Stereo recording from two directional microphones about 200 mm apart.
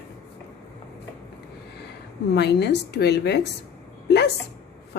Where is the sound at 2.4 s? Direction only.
55° left (ahead or behind).